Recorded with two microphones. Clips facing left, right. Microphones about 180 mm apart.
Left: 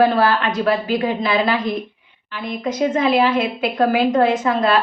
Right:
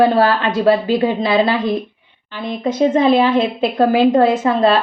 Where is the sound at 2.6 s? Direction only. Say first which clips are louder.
Right 5 dB; 30° right (ahead or behind).